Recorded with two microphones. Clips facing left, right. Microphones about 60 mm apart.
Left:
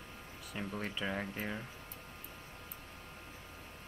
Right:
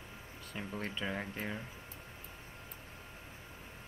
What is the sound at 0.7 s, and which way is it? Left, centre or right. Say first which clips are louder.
Speech: even; centre.